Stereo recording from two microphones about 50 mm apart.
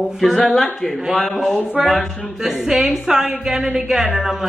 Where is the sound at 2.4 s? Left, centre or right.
Centre.